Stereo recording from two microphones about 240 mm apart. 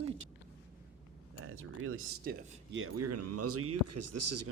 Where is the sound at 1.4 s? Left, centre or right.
Right.